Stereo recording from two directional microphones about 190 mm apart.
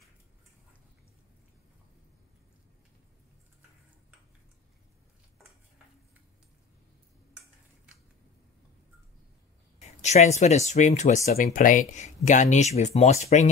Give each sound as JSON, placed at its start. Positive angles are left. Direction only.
{"t": 9.8, "sound": "speech", "side_deg": 35}